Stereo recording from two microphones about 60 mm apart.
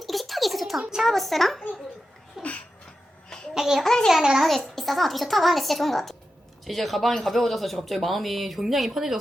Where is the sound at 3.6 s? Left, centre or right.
Centre.